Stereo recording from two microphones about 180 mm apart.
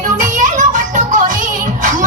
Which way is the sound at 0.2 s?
45° right (ahead or behind).